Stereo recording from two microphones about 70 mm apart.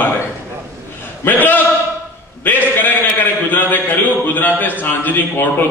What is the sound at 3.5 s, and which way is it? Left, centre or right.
A man's voice, left.